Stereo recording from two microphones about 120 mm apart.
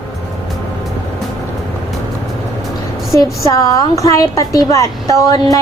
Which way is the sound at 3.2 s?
30° left (ahead or behind).